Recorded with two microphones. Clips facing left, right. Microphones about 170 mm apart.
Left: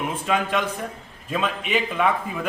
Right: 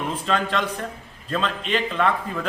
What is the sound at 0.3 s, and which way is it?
A man's voice, 10° left (ahead or behind).